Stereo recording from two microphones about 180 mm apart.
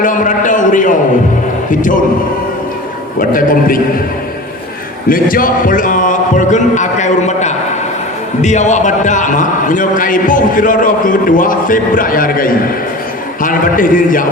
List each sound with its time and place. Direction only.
0.0 s a man's voice: 45° left (ahead or behind)
3.2 s a man's voice: 50° left (ahead or behind)
5.0 s a man's voice: 50° left (ahead or behind)